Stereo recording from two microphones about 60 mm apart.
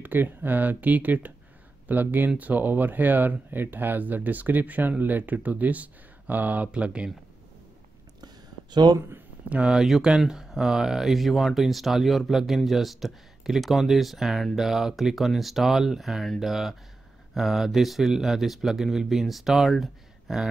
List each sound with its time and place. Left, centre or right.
0.0 s speech: right
9.5 s speech: centre
9.8 s speech: centre